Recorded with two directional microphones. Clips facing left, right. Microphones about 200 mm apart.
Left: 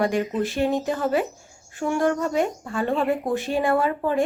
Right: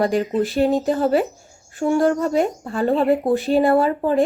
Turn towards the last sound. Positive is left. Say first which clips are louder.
# right 5 dB
turn(degrees=-35)  # may be behind; listen again after turning